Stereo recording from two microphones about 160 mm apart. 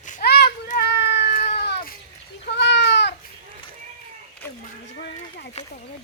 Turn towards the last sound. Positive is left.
turn(degrees=85)